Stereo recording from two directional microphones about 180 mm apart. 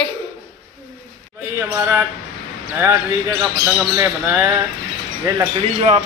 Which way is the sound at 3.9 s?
10° right (ahead or behind).